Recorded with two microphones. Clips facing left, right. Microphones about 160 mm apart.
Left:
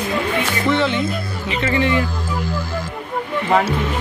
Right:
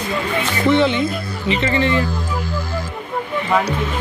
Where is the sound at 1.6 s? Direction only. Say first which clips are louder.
Left 1 dB; 10° left (ahead or behind).